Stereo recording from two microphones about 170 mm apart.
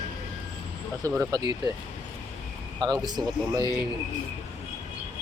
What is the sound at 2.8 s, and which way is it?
Speech, 25° right (ahead or behind).